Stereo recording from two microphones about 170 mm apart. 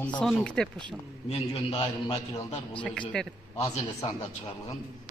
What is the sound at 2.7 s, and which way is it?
Speech, 5° left (ahead or behind).